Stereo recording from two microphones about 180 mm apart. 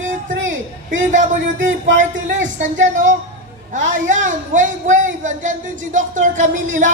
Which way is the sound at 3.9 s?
45° right (ahead or behind).